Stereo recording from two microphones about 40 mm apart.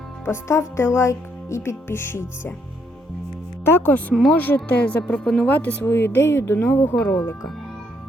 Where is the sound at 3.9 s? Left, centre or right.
Left.